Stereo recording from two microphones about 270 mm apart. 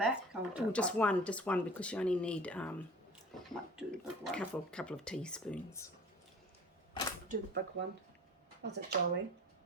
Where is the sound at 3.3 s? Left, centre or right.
Centre.